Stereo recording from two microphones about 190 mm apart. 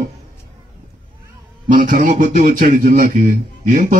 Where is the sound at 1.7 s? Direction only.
45° right (ahead or behind).